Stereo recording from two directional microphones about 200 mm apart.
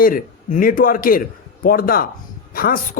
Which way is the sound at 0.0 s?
45° left (ahead or behind).